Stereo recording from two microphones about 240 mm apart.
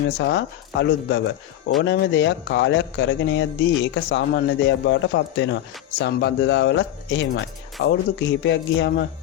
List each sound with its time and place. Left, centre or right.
0.2 s speech: left